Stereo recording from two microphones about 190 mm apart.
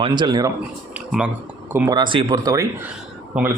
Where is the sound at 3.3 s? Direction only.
5° right (ahead or behind).